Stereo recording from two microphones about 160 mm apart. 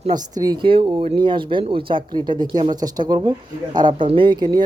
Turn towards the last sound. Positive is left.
turn(degrees=-25)  # may be behind; listen again after turning